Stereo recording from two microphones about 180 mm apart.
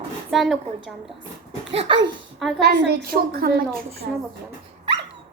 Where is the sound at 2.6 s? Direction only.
60° right (ahead or behind).